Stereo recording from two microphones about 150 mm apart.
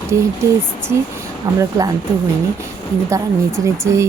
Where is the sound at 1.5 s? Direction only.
20° right (ahead or behind).